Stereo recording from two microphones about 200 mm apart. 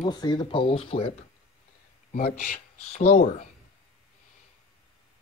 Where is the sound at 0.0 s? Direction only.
20° left (ahead or behind).